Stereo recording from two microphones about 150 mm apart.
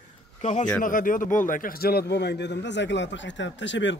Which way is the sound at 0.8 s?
65° left (ahead or behind).